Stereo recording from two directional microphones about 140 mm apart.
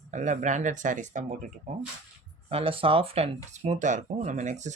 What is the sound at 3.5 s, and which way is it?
Speech, 55° right (ahead or behind).